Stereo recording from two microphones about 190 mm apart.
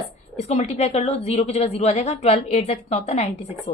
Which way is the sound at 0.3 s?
35° left (ahead or behind).